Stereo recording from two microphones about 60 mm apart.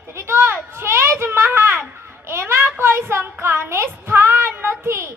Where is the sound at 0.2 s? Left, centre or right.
Right.